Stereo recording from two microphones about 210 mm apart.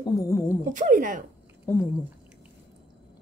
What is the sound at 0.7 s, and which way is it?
Speech, 40° right (ahead or behind).